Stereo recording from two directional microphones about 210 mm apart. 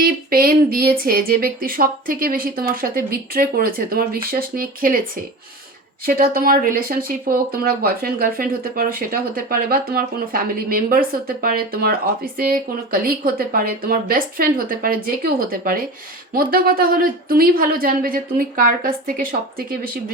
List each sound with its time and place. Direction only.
0.0 s speech: 45° right (ahead or behind)
6.1 s speech: 45° right (ahead or behind)